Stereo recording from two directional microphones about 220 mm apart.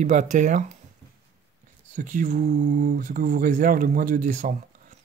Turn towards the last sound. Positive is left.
turn(degrees=-35)  # may be behind; listen again after turning